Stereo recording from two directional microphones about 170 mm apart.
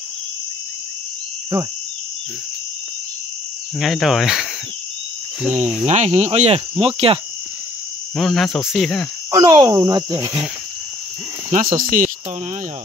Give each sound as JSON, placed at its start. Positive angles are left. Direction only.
{"t": 3.8, "sound": "speech", "side_deg": 0}
{"t": 5.5, "sound": "speech", "side_deg": -45}
{"t": 8.2, "sound": "speech", "side_deg": 0}
{"t": 9.3, "sound": "speech", "side_deg": -25}
{"t": 11.7, "sound": "speech", "side_deg": -50}